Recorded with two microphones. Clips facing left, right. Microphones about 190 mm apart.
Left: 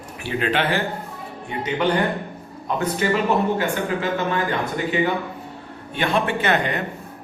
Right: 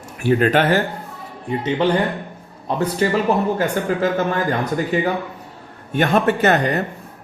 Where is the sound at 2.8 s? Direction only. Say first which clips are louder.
Right 3 dB; 40° right (ahead or behind).